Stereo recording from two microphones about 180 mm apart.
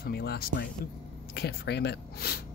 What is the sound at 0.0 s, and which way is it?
Speech, 65° left (ahead or behind).